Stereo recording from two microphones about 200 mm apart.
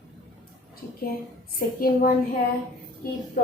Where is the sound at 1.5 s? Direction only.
45° left (ahead or behind).